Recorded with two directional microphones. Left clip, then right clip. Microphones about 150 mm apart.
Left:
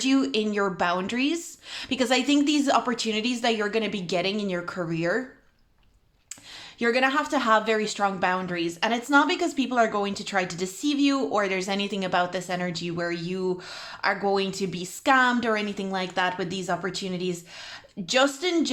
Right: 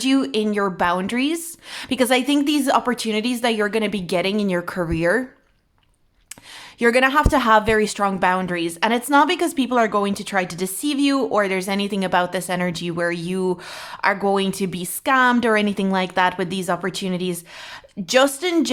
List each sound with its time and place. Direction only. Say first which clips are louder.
0.0 s a woman's voice: right 4 dB; 30° right (ahead or behind)
6.7 s a woman's voice: right 7 dB; 45° right (ahead or behind)